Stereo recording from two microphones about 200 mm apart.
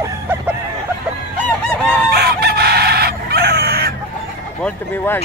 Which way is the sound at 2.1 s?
55° right (ahead or behind).